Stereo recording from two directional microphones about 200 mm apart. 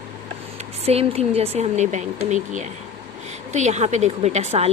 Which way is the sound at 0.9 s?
30° right (ahead or behind).